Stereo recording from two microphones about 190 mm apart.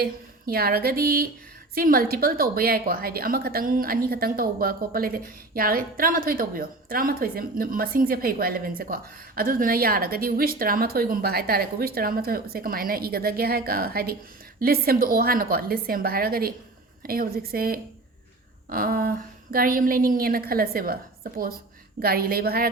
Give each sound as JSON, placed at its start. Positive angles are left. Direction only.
{"t": 0.0, "sound": "a woman's voice", "side_deg": -55}